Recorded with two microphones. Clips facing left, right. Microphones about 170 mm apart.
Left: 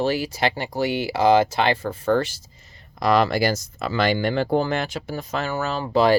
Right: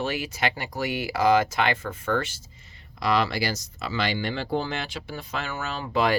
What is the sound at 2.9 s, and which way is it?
Speech, 45° left (ahead or behind).